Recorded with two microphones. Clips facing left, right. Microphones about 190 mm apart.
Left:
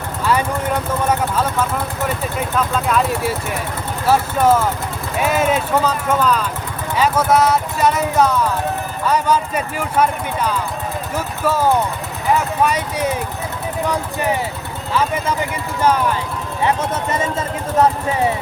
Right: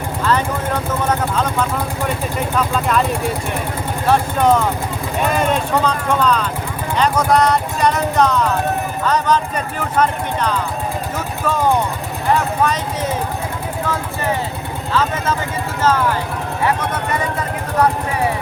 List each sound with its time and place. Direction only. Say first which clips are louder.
0.3 s speech: left 1 dB; 10° left (ahead or behind)